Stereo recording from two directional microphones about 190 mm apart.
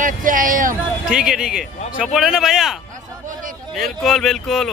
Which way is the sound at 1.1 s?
5° right (ahead or behind).